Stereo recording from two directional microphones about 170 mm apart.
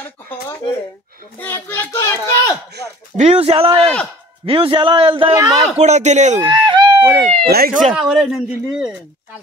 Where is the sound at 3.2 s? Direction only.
35° right (ahead or behind); by 5.6 s 20° right (ahead or behind).